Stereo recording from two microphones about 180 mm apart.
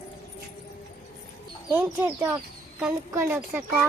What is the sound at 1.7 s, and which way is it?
Speech, 10° right (ahead or behind).